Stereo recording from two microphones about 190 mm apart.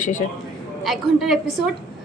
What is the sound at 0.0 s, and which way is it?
Speech, 40° left (ahead or behind).